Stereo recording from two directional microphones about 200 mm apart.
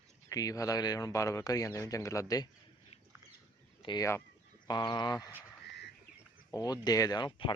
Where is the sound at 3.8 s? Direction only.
20° left (ahead or behind).